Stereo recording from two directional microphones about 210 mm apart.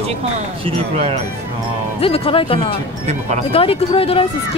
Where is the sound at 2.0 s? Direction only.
25° left (ahead or behind).